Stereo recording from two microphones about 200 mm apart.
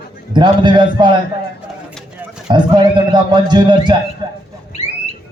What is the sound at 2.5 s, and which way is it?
A man's voice, 20° right (ahead or behind).